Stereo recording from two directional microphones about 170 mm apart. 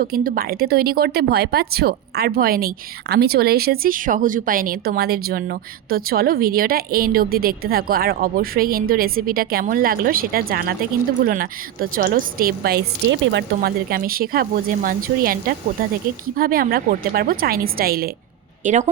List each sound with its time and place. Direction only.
0.0 s speech: 60° right (ahead or behind)
18.6 s a woman's voice: 45° right (ahead or behind)